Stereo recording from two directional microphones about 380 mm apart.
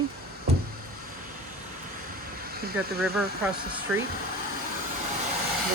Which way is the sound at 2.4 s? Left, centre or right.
Right.